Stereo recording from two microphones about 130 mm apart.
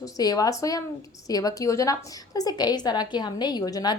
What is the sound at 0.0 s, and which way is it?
A woman's voice, 30° left (ahead or behind).